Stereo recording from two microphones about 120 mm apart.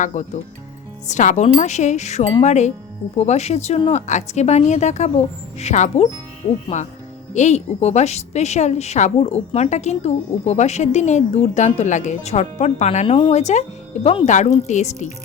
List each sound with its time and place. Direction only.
0.0 s a woman's voice: 80° left; by 3.8 s 65° left (ahead or behind)
3.9 s a woman's voice: 75° left (ahead or behind); by 14.3 s 55° left (ahead or behind)
14.3 s a woman's voice: 90° left
14.7 s a woman's voice: 75° left (ahead or behind)